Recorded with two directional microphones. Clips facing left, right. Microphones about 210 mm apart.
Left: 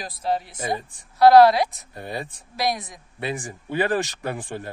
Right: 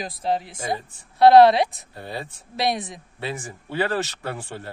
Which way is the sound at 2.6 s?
25° right (ahead or behind).